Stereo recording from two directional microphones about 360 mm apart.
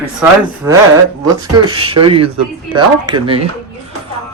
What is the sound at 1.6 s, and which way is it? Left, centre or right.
Speech, centre.